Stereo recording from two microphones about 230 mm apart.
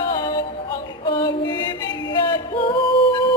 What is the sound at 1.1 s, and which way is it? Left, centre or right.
Female singing, centre.